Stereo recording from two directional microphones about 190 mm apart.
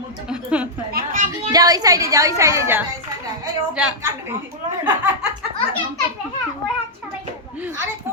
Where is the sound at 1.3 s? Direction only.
20° right (ahead or behind).